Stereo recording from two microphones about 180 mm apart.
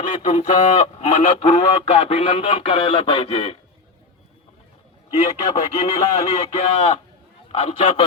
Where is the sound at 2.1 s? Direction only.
35° left (ahead or behind).